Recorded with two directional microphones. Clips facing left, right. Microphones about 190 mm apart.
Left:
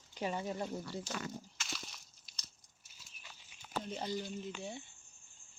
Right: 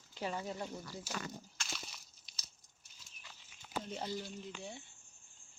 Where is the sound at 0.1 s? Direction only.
15° left (ahead or behind).